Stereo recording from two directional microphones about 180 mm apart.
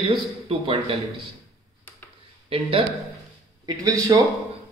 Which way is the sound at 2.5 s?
30° right (ahead or behind).